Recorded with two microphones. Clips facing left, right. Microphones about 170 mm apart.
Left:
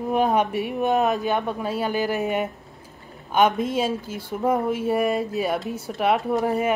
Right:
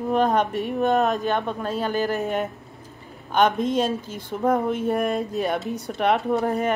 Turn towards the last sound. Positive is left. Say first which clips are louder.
# even
turn(degrees=5)  # may be behind; listen again after turning